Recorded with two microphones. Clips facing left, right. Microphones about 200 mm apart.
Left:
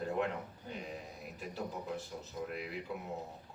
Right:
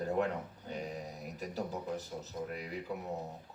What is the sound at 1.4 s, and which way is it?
Speech, 40° right (ahead or behind).